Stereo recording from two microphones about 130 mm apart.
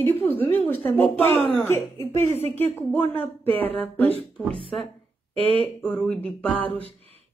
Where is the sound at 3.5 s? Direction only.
50° right (ahead or behind).